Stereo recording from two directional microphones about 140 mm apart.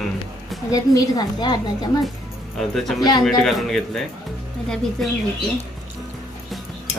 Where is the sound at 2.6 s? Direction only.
Centre (ahead or behind).